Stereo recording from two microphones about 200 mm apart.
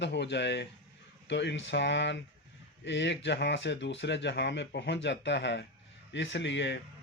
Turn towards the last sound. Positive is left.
turn(degrees=65)  # may be behind; listen again after turning